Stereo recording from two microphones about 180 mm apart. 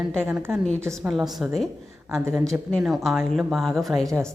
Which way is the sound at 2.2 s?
15° right (ahead or behind).